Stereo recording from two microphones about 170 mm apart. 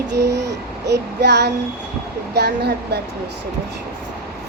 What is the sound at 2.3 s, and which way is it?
Speech, 75° right (ahead or behind).